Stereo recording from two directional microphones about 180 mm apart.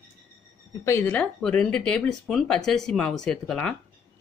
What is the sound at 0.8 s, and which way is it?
Speech, 10° left (ahead or behind).